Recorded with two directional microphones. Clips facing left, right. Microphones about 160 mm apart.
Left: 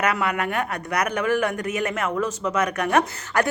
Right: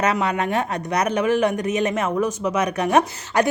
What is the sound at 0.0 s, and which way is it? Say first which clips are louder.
Speech: right 2 dB; 25° right (ahead or behind).